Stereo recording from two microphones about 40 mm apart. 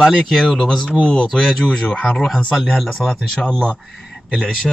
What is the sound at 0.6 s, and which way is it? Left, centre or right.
Speech, left.